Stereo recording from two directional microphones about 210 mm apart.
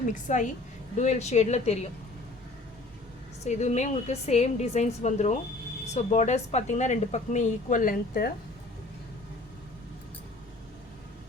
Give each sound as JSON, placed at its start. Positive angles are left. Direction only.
{"t": 0.0, "sound": "speech", "side_deg": 35}
{"t": 3.4, "sound": "speech", "side_deg": 35}